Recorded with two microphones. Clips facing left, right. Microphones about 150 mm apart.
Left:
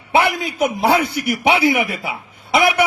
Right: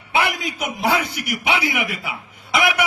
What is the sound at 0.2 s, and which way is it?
A man's voice, 30° left (ahead or behind).